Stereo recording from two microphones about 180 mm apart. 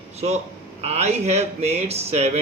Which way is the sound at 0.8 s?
35° right (ahead or behind).